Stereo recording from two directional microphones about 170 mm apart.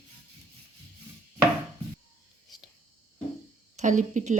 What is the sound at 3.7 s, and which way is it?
Speech, 45° right (ahead or behind).